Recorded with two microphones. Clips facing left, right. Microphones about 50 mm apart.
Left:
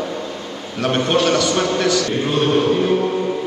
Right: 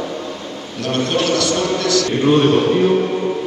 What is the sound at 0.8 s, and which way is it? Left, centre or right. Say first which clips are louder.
A man's voice: left 2 dB; centre.